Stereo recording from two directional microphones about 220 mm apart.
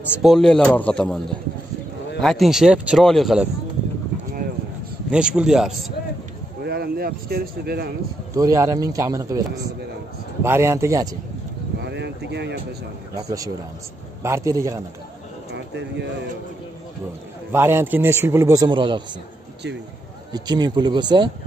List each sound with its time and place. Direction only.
0.1 s speech: centre (ahead or behind)
2.2 s speech: centre (ahead or behind)
5.1 s speech: 5° right (ahead or behind)
6.6 s speech: 45° right (ahead or behind)
8.4 s a man's voice: 15° right (ahead or behind)
10.4 s a man's voice: 10° right (ahead or behind)
11.8 s a sound: 50° right (ahead or behind)
13.1 s a man's voice: 15° right (ahead or behind)
15.5 s speech: 50° right (ahead or behind)
17.5 s a man's voice: 10° right (ahead or behind)
20.3 s speech: 20° right (ahead or behind)